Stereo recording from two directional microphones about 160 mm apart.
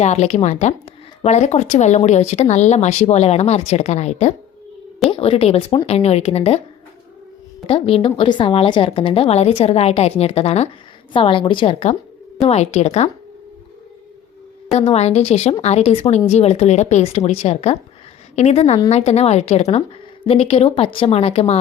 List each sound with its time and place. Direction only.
0.0 s a woman's voice: 45° left (ahead or behind)
7.7 s a woman's voice: 35° left (ahead or behind)
14.7 s a woman's voice: 40° left (ahead or behind)